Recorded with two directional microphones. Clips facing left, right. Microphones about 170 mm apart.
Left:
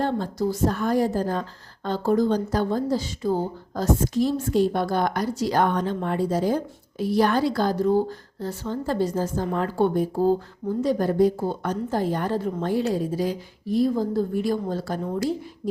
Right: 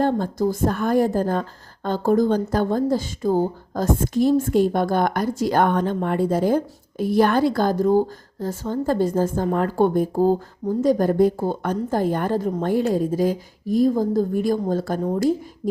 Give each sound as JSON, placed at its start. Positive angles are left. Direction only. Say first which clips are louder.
{"t": 0.0, "sound": "a woman's voice", "louder": "right 4 dB", "side_deg": -50}